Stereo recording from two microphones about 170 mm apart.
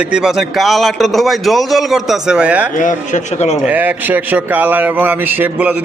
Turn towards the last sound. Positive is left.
turn(degrees=-10)  # may be behind; listen again after turning